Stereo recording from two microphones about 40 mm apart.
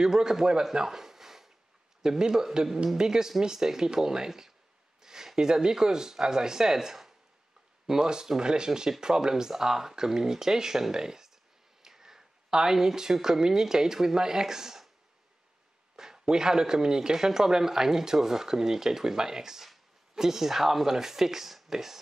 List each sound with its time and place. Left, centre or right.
0.0 s speech: centre
16.0 s speech: centre